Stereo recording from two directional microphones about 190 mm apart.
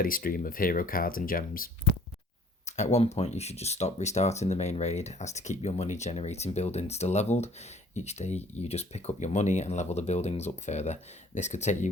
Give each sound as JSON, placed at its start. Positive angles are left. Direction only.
{"t": 0.0, "sound": "speech", "side_deg": 50}
{"t": 2.6, "sound": "speech", "side_deg": 35}